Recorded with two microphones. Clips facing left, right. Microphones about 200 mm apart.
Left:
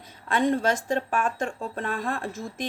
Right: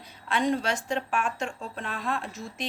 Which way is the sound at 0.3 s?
50° left (ahead or behind).